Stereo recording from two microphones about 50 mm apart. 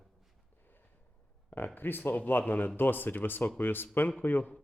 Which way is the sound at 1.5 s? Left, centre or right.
Left.